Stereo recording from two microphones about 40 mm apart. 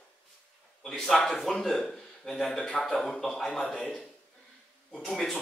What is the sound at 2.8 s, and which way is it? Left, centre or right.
Speech, centre.